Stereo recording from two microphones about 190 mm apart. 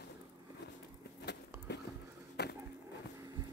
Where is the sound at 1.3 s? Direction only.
65° left (ahead or behind).